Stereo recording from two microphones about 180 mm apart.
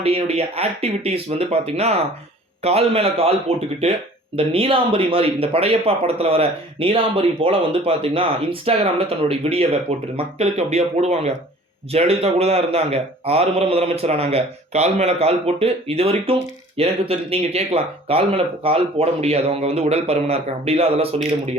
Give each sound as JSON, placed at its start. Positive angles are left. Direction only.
{"t": 0.0, "sound": "a man's voice", "side_deg": -35}